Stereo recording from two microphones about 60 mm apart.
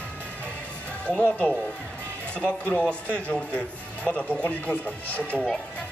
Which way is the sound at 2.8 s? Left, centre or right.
Centre.